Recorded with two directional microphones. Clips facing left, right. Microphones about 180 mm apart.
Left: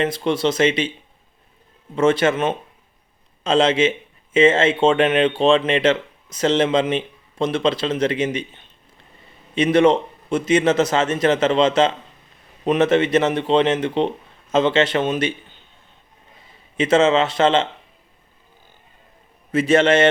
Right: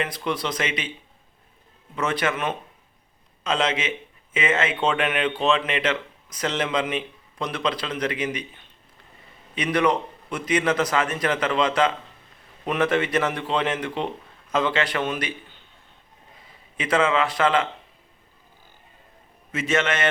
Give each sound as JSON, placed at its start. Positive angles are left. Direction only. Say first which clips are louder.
{"t": 0.0, "sound": "speech", "louder": "left 7 dB", "side_deg": 25}
{"t": 2.0, "sound": "speech", "louder": "left 8 dB", "side_deg": 25}
{"t": 16.7, "sound": "speech", "louder": "left 6 dB", "side_deg": 25}
{"t": 19.5, "sound": "a man's voice", "louder": "left 9 dB", "side_deg": 35}